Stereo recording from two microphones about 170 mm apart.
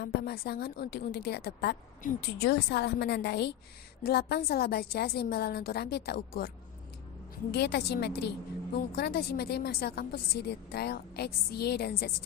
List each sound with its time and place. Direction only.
0.0 s a woman's voice: 65° left (ahead or behind)
7.5 s a woman's voice: 75° left (ahead or behind)